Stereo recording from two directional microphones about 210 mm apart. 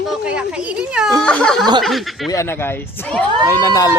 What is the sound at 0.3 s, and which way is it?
Speech, 5° right (ahead or behind).